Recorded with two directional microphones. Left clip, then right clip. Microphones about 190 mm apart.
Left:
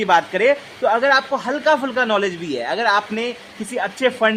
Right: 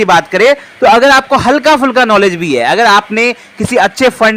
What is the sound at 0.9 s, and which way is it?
A man's voice, 40° right (ahead or behind).